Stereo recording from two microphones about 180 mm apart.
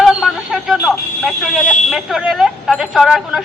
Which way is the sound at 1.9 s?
Centre (ahead or behind).